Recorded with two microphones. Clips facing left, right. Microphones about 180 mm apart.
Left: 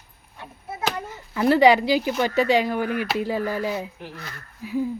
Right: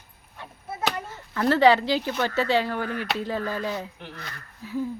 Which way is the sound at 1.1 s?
15° left (ahead or behind).